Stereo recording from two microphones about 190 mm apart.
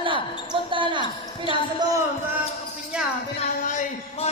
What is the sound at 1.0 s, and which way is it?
Speech, 25° left (ahead or behind).